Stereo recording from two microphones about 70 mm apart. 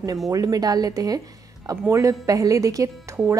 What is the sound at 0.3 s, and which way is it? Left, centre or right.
Speech, right.